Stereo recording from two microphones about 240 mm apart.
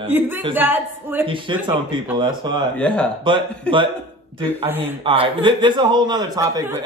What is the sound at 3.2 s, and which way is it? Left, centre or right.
Speech, centre.